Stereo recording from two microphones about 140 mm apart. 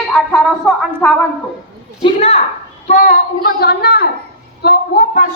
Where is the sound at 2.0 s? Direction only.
45° left (ahead or behind).